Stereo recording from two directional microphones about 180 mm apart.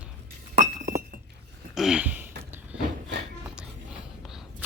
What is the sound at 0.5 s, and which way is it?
Glass, 50° right (ahead or behind).